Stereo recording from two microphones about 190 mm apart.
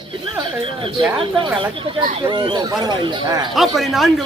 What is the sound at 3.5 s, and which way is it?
Speech, centre (ahead or behind).